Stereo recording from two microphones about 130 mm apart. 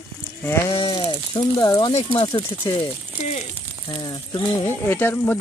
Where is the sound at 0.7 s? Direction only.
40° left (ahead or behind).